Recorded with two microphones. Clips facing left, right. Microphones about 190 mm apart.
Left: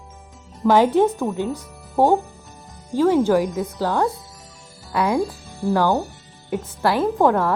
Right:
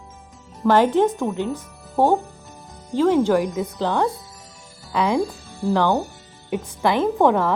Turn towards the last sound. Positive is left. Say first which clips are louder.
# even
turn(degrees=0)  # may be behind; listen again after turning